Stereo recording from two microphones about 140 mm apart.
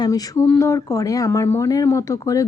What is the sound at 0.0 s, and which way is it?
Speech, 20° left (ahead or behind).